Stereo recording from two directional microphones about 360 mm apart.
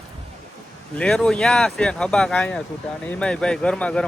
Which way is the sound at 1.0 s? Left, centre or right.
Centre.